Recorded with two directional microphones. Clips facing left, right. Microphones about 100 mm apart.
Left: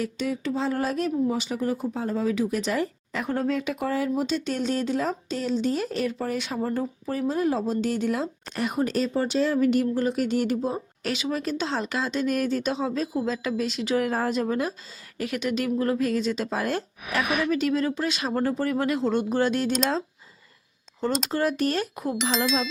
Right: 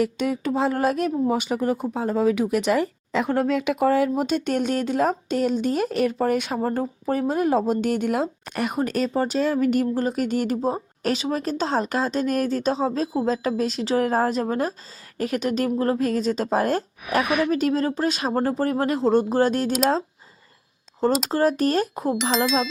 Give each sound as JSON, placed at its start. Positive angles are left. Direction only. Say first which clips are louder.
{"t": 0.0, "sound": "speech", "louder": "right 5 dB", "side_deg": -55}
{"t": 21.2, "sound": "speech", "louder": "right 4 dB", "side_deg": -35}
{"t": 22.2, "sound": "speech", "louder": "right 2 dB", "side_deg": 0}